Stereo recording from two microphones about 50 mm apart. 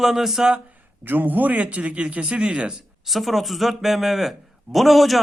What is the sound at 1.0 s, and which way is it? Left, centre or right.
A man's voice, right.